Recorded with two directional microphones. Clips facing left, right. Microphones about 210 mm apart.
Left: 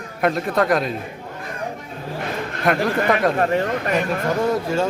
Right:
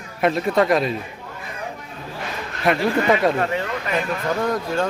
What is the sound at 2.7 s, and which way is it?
Speech, centre (ahead or behind).